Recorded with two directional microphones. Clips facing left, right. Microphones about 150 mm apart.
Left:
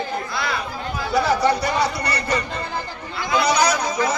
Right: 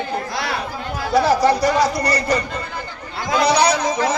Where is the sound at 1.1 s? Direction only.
35° right (ahead or behind).